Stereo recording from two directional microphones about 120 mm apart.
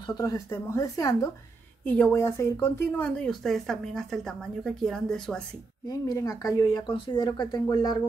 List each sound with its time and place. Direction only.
0.0 s speech: 35° left (ahead or behind)
1.9 s a woman's voice: 10° left (ahead or behind)
2.1 s speech: 25° left (ahead or behind)
3.0 s speech: 5° left (ahead or behind)
5.9 s speech: 30° left (ahead or behind)